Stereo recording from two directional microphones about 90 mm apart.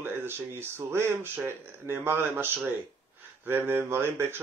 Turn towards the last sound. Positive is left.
turn(degrees=-25)  # may be behind; listen again after turning